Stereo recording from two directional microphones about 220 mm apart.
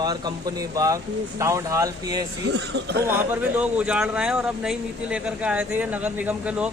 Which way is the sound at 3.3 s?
5° right (ahead or behind).